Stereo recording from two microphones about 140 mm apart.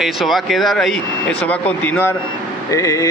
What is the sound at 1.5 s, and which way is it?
Speech, 10° left (ahead or behind).